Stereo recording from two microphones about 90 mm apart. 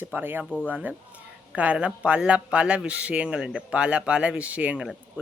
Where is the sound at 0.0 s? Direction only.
20° right (ahead or behind).